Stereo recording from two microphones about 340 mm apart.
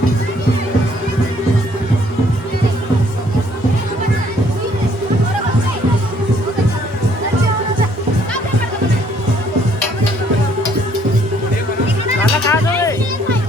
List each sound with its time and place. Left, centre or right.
12.5 s music: centre